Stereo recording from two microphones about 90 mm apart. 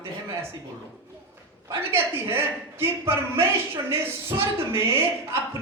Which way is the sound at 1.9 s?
30° right (ahead or behind).